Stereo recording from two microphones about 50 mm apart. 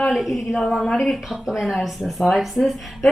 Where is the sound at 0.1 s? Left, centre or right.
Centre.